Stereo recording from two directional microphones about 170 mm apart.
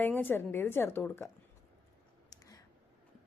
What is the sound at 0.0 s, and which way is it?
Speech, 10° left (ahead or behind).